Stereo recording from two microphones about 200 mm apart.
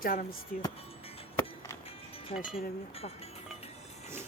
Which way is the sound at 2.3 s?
30° left (ahead or behind).